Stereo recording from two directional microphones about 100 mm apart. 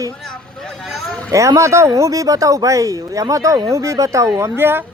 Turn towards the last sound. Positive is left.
turn(degrees=-25)  # may be behind; listen again after turning